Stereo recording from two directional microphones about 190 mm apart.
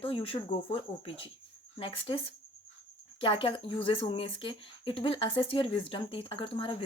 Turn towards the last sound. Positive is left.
turn(degrees=30)  # may be behind; listen again after turning